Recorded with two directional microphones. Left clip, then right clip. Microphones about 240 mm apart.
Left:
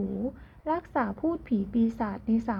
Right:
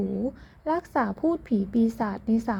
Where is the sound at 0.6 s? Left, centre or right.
Right.